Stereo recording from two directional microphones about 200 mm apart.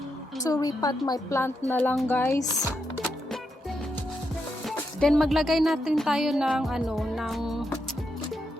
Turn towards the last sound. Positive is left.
turn(degrees=0)  # may be behind; listen again after turning